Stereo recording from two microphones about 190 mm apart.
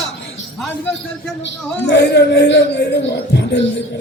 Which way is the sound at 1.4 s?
70° left (ahead or behind).